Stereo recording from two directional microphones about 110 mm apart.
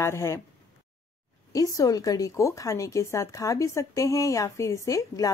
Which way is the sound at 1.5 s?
35° left (ahead or behind).